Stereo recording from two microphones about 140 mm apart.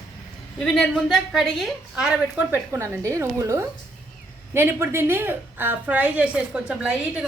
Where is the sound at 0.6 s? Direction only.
5° left (ahead or behind).